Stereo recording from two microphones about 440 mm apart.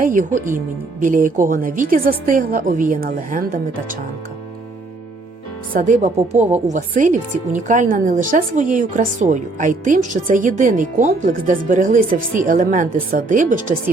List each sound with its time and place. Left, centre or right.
0.0 s a woman's voice: centre
5.7 s speech: centre